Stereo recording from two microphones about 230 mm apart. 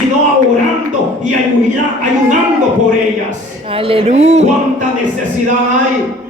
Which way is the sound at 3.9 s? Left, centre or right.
Right.